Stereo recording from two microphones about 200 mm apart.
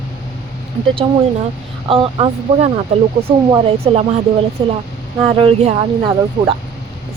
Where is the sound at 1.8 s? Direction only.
30° right (ahead or behind).